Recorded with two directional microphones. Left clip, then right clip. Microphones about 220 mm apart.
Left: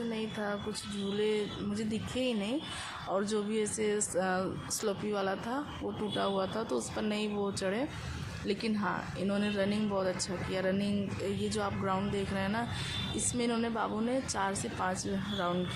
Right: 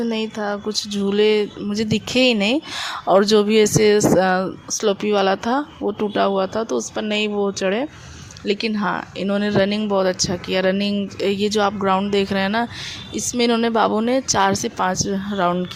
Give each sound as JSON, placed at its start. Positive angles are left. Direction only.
{"t": 0.1, "sound": "speech", "side_deg": -45}